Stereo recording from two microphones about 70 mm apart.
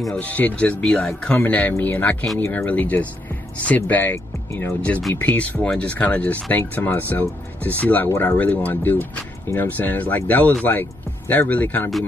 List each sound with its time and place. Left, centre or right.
0.1 s speech: left
0.8 s speech: centre
1.2 s speech: left